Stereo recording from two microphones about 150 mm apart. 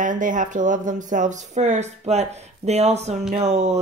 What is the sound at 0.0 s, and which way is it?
Speech, 60° right (ahead or behind).